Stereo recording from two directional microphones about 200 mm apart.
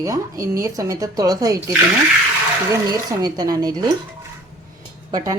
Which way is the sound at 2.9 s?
20° right (ahead or behind).